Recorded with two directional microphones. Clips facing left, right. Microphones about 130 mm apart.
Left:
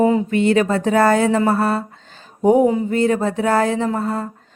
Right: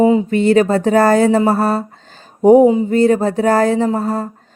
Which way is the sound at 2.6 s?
20° right (ahead or behind).